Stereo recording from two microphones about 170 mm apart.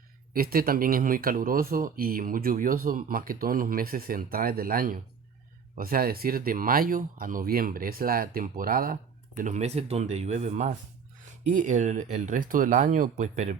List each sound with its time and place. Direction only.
0.3 s speech: 60° right (ahead or behind); by 13.6 s 45° right (ahead or behind)